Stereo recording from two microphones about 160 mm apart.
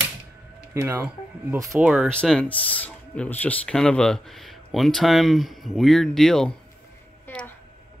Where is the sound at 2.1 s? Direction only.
5° left (ahead or behind).